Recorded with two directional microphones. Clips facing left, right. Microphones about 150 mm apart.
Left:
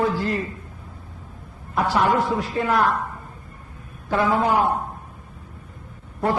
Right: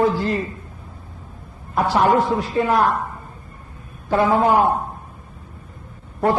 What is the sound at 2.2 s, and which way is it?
Speech, 25° right (ahead or behind).